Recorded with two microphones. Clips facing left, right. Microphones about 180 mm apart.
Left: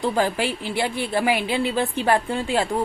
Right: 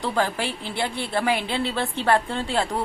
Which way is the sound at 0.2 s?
15° left (ahead or behind).